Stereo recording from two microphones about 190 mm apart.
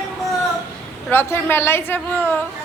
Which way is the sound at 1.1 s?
10° left (ahead or behind).